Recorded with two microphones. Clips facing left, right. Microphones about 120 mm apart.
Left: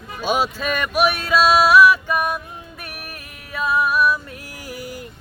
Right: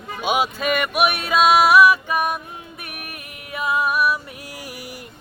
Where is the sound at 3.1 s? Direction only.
15° right (ahead or behind).